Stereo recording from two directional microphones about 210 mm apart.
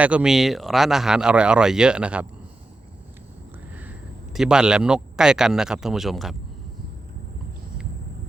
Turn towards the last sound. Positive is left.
turn(degrees=0)  # may be behind; listen again after turning